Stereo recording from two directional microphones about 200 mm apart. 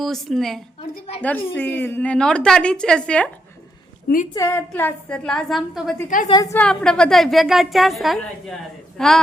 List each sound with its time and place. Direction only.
0.0 s a woman's voice: centre (ahead or behind)
0.8 s a sound: 30° left (ahead or behind)
1.2 s a woman's voice: 10° left (ahead or behind)
4.4 s a woman's voice: 10° left (ahead or behind)
6.2 s a woman's voice: 20° left (ahead or behind)
6.6 s a woman's voice: 5° left (ahead or behind)